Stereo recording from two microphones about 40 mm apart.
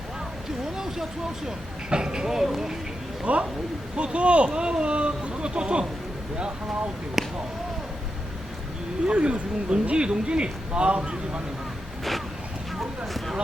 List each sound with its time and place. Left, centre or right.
0.8 s a sound: centre
1.5 s speech: centre
3.3 s speech: right
7.2 s speech: centre
9.0 s speech: right